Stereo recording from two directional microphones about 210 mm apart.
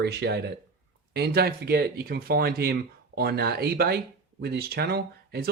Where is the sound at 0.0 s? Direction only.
50° right (ahead or behind).